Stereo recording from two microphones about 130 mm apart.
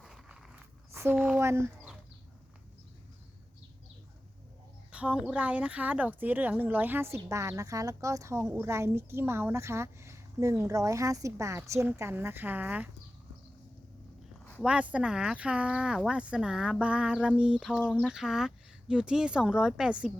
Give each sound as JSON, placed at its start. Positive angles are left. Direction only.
{"t": 0.0, "sound": "a sound", "side_deg": -5}
{"t": 0.9, "sound": "speech", "side_deg": -15}
{"t": 4.9, "sound": "speech", "side_deg": -10}
{"t": 14.6, "sound": "speech", "side_deg": -10}